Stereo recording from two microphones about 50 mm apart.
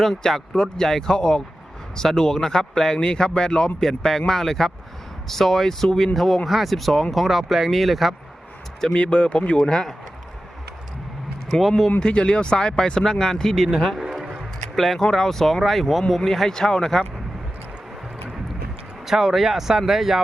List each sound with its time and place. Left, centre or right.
0.0 s speech: centre
8.9 s speech: left
11.9 s speech: centre
13.9 s a sound: centre
14.8 s speech: centre
19.0 s speech: centre